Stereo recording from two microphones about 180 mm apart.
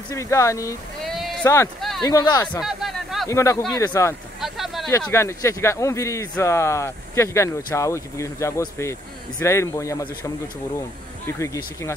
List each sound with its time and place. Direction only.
0.1 s speech: 15° left (ahead or behind)
1.0 s sheep: centre (ahead or behind)
1.4 s speech: 15° left (ahead or behind)
1.8 s a sound: centre (ahead or behind)
2.0 s speech: 20° left (ahead or behind)
2.6 s a sound: centre (ahead or behind)
3.3 s speech: 15° left (ahead or behind)
4.4 s a sound: centre (ahead or behind)
5.1 s speech: 15° left (ahead or behind)
11.2 s speech: 15° left (ahead or behind)